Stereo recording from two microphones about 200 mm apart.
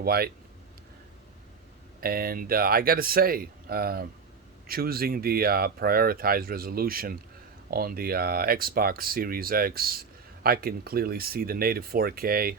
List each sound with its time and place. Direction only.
0.0 s speech: 50° right (ahead or behind)
2.0 s speech: 50° right (ahead or behind)